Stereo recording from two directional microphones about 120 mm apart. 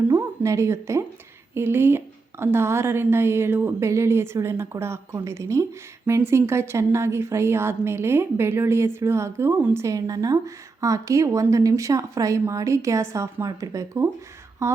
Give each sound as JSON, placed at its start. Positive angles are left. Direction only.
{"t": 0.1, "sound": "a woman's voice", "side_deg": -25}
{"t": 9.8, "sound": "a woman's voice", "side_deg": -30}
{"t": 14.6, "sound": "a sound", "side_deg": -25}